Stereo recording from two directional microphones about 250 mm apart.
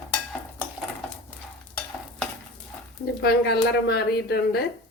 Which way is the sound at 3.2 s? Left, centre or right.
Left.